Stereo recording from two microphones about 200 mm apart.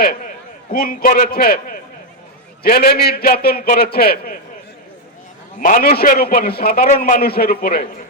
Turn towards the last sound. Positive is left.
turn(degrees=50)  # may be behind; listen again after turning